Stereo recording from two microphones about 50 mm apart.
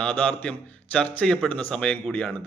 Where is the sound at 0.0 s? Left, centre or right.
Left.